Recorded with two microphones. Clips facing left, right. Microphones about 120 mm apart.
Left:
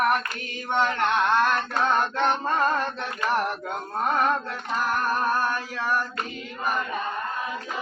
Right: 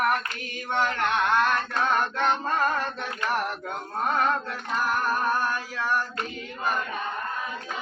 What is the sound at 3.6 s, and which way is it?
Music, 15° left (ahead or behind).